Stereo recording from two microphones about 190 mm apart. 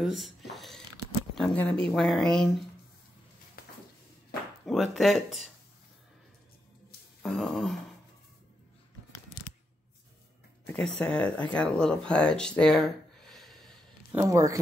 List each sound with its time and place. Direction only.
0.0 s speech: centre (ahead or behind)
3.6 s a sound: 50° left (ahead or behind)
4.6 s speech: centre (ahead or behind)
7.2 s speech: centre (ahead or behind)
10.7 s speech: 5° left (ahead or behind)
12.1 s a sound: 5° left (ahead or behind)
14.1 s speech: 15° right (ahead or behind)